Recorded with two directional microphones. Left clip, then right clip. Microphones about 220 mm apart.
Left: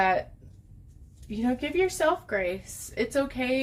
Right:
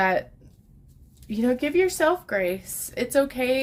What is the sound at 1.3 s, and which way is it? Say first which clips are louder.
A woman's voice: right 5 dB; 50° right (ahead or behind).